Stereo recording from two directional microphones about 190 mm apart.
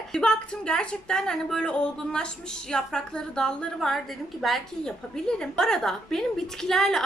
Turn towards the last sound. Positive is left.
turn(degrees=0)  # may be behind; listen again after turning